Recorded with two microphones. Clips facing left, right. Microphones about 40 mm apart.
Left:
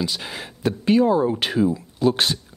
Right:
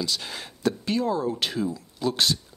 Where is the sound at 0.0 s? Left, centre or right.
Left.